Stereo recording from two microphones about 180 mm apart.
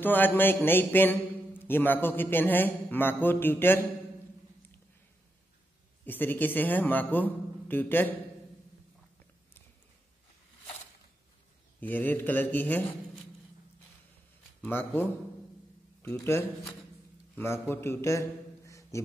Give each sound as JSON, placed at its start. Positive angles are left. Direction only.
{"t": 0.0, "sound": "a man's voice", "side_deg": 10}
{"t": 6.0, "sound": "a man's voice", "side_deg": 10}
{"t": 11.8, "sound": "a man's voice", "side_deg": 10}
{"t": 14.6, "sound": "a man's voice", "side_deg": 10}
{"t": 18.7, "sound": "a sound", "side_deg": 15}